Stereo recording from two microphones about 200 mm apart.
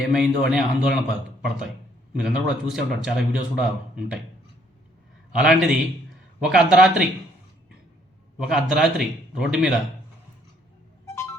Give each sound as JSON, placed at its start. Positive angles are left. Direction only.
{"t": 0.0, "sound": "speech", "side_deg": -5}
{"t": 2.2, "sound": "speech", "side_deg": 0}
{"t": 5.3, "sound": "speech", "side_deg": 0}
{"t": 8.4, "sound": "speech", "side_deg": 0}
{"t": 11.0, "sound": "a sound", "side_deg": 15}